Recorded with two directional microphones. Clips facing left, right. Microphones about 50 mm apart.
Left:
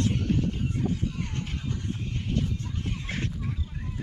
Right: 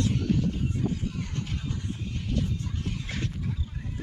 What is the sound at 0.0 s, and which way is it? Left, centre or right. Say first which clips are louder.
Music: even; left.